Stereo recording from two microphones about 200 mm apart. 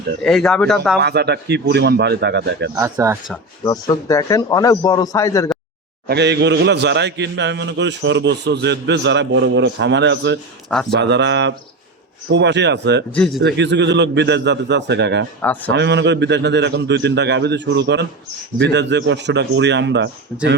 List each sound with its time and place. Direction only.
0.2 s speech: centre (ahead or behind)
0.9 s a man's voice: 55° right (ahead or behind)
2.7 s speech: 15° right (ahead or behind)
3.6 s a man's voice: 15° left (ahead or behind)
6.1 s a man's voice: 55° right (ahead or behind)
10.7 s speech: 5° left (ahead or behind)
10.9 s a man's voice: 60° right (ahead or behind)
13.1 s speech: 5° left (ahead or behind)
13.4 s a man's voice: 60° right (ahead or behind)
15.4 s a man's voice: 10° left (ahead or behind)
15.7 s a man's voice: 60° right (ahead or behind)